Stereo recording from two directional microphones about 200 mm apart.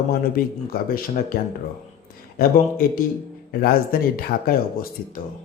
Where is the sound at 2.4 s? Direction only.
45° left (ahead or behind).